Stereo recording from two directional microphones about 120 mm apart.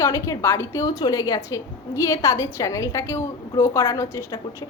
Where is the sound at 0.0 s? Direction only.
25° left (ahead or behind).